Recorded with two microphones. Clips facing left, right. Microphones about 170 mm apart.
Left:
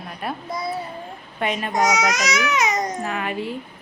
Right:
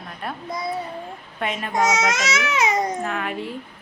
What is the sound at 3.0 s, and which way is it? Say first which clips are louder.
Speech: left 1 dB; 5° left (ahead or behind).